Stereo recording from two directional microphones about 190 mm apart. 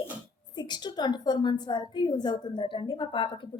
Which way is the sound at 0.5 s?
20° left (ahead or behind).